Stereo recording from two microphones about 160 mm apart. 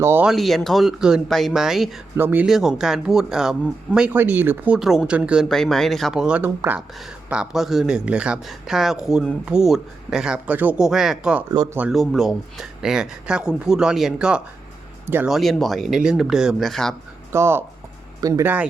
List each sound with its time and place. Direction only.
0.0 s speech: 15° right (ahead or behind)
0.3 s speech: centre (ahead or behind)
2.1 s speech: 10° right (ahead or behind)
2.5 s speech: centre (ahead or behind)
11.5 s speech: 25° right (ahead or behind)
11.8 s speech: centre (ahead or behind)
15.3 s speech: centre (ahead or behind)
17.3 s speech: 15° right (ahead or behind)